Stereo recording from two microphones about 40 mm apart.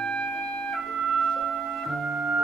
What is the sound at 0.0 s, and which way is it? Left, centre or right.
Music, left.